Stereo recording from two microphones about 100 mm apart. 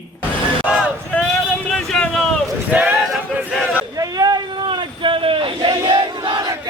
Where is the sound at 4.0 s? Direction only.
40° right (ahead or behind).